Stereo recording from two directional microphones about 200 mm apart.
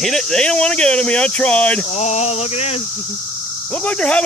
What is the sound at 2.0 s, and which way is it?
Speech, 35° left (ahead or behind).